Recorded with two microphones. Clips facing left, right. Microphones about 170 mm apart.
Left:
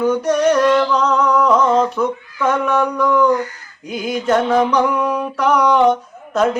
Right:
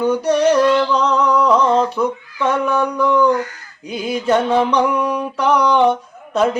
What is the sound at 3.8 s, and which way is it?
Music, centre (ahead or behind).